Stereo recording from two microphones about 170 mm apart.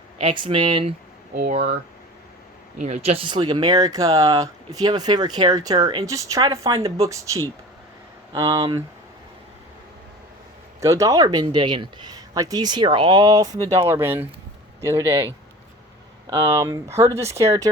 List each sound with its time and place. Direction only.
0.2 s speech: 30° right (ahead or behind)
1.4 s speech: 45° right (ahead or behind)
2.7 s speech: 45° right (ahead or behind); by 6.7 s 15° right (ahead or behind)
6.7 s speech: 35° right (ahead or behind)
7.0 s speech: 20° right (ahead or behind)
8.3 s speech: 20° right (ahead or behind)
10.8 s speech: 20° right (ahead or behind)
16.3 s speech: 20° right (ahead or behind)